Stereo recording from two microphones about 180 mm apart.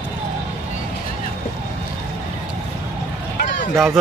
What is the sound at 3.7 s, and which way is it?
Speech, centre (ahead or behind).